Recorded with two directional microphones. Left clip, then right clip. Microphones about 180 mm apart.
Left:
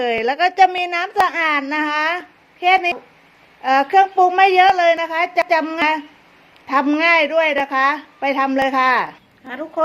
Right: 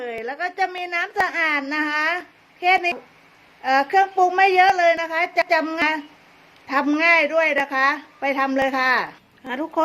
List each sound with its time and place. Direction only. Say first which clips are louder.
0.0 s a woman's voice: left 10 dB; 40° left (ahead or behind); by 9.1 s 5° left (ahead or behind)
9.5 s speech: right 1 dB; 35° right (ahead or behind)